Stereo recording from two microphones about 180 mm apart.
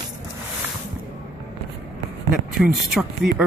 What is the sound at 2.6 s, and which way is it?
Speech, centre (ahead or behind).